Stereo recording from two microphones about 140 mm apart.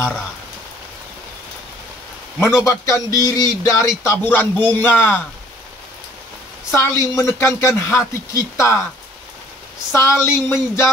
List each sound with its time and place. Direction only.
2.4 s a man's voice: 20° left (ahead or behind)
6.7 s a man's voice: 20° left (ahead or behind)
9.9 s a man's voice: 20° left (ahead or behind)